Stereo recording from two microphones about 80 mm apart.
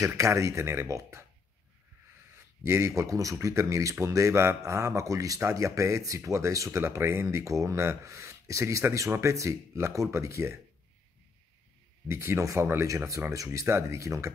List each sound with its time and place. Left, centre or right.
0.0 s speech: right
2.3 s speech: right
12.1 s speech: right